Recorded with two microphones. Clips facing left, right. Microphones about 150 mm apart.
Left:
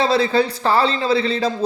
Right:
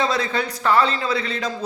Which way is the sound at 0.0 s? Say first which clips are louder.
Left 6 dB; 30° left (ahead or behind).